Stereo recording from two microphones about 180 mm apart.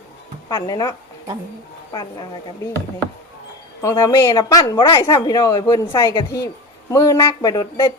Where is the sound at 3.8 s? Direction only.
15° left (ahead or behind).